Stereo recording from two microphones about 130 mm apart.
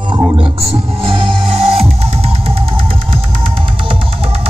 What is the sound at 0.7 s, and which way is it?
Music, 45° right (ahead or behind).